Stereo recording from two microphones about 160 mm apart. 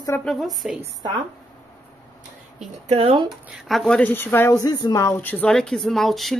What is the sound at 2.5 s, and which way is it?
Speech, 40° right (ahead or behind).